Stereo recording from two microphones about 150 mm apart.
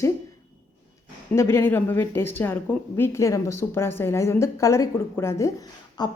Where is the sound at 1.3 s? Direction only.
15° left (ahead or behind).